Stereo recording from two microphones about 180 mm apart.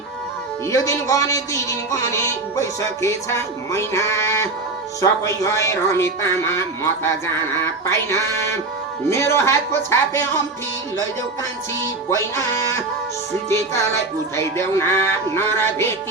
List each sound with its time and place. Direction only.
0.7 s speech: 20° left (ahead or behind)
13.5 s speech: 15° left (ahead or behind)